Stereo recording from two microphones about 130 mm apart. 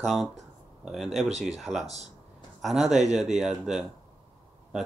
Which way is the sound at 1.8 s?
55° right (ahead or behind).